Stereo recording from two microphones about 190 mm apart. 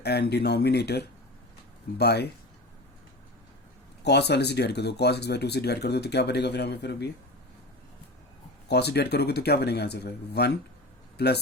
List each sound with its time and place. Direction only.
0.0 s speech: 60° left (ahead or behind)
4.0 s speech: 60° left (ahead or behind)
8.6 s speech: 60° left (ahead or behind)